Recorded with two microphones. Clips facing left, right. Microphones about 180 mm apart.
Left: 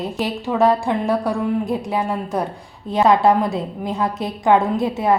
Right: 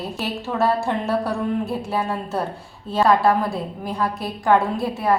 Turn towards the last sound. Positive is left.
turn(degrees=20)  # may be behind; listen again after turning